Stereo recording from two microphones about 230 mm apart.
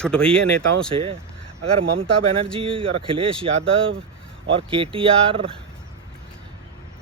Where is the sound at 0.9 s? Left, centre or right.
Right.